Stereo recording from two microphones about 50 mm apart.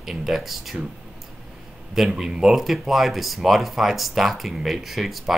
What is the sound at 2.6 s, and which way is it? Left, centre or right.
Speech, centre.